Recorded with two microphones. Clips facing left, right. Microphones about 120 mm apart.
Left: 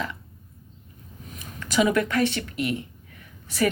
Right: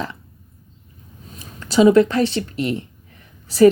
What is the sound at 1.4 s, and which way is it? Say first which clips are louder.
Speech: right 7 dB; 30° right (ahead or behind).